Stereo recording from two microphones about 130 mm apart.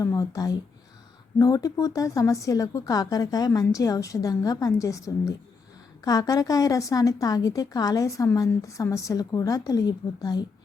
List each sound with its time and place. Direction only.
0.0 s a woman's voice: 25° left (ahead or behind)